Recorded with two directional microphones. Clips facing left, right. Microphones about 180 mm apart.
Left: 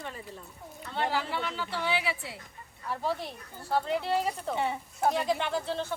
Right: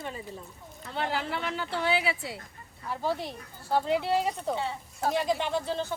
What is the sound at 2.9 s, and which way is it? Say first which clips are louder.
Speech: right 1 dB; centre (ahead or behind).